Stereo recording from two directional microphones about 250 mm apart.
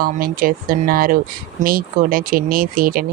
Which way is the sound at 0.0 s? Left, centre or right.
Right.